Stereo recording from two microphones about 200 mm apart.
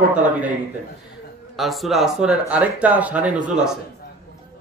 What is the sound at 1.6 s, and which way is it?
Speech, centre (ahead or behind).